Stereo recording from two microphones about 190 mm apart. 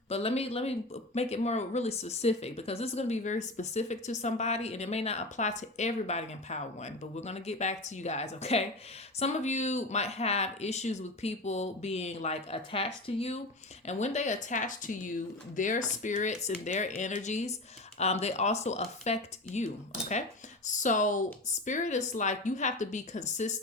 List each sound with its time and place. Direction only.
0.1 s speech: 30° left (ahead or behind)